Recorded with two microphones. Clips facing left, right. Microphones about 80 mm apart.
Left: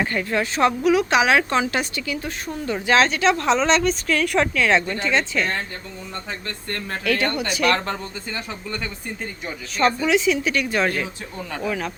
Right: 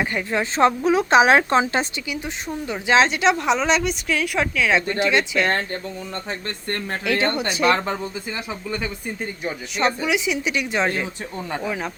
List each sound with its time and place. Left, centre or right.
0.0 s speech: centre
2.0 s a woman's voice: centre
6.7 s speech: right
7.9 s a woman's voice: centre